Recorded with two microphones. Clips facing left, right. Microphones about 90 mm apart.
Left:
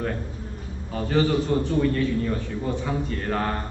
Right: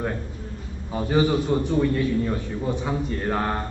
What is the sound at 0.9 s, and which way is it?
A man's voice, 15° right (ahead or behind).